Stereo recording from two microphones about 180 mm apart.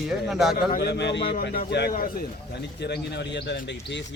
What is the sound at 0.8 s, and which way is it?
Speech, 70° left (ahead or behind).